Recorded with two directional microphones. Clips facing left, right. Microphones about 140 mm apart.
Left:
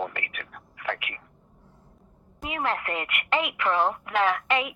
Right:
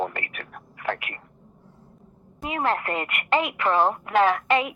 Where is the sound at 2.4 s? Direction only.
35° right (ahead or behind).